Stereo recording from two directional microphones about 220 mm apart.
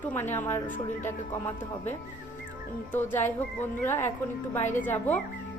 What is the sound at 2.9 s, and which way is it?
Speech, 10° left (ahead or behind).